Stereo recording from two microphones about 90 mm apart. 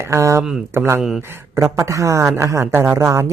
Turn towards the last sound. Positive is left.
turn(degrees=-25)  # may be behind; listen again after turning